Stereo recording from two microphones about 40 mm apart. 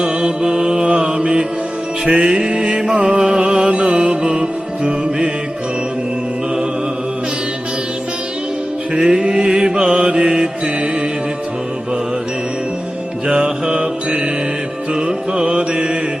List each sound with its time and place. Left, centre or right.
0.0 s mantra: right
2.0 s music: right
9.0 s mantra: right
13.4 s mantra: right